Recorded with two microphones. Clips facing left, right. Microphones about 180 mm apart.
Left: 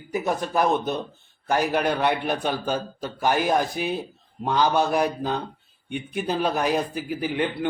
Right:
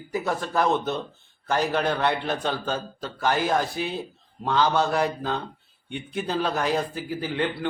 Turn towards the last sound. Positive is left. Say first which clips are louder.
# left 2 dB
turn(degrees=15)  # may be behind; listen again after turning